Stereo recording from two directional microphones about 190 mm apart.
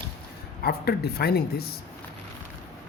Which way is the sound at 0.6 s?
55° left (ahead or behind).